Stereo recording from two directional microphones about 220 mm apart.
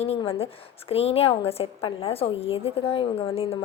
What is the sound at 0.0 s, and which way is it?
Speech, 25° left (ahead or behind).